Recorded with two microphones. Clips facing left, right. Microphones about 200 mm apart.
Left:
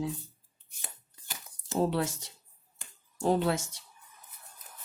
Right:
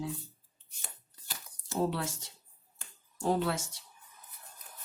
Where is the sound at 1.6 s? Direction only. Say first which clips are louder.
Left 3 dB; 20° left (ahead or behind).